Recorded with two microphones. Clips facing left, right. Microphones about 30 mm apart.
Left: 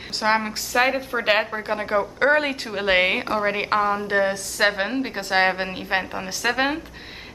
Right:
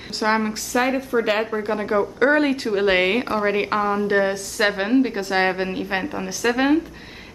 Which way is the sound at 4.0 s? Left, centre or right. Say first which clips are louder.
Right 2 dB; centre.